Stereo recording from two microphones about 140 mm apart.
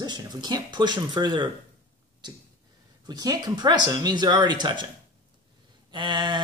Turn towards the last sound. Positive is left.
turn(degrees=-30)  # may be behind; listen again after turning